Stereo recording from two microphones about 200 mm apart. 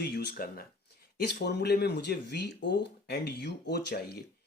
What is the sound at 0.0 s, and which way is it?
Speech, 55° left (ahead or behind).